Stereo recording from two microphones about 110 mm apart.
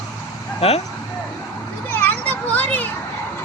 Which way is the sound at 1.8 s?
20° left (ahead or behind).